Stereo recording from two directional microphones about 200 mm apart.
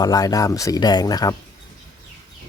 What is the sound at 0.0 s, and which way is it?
Speech, 20° left (ahead or behind).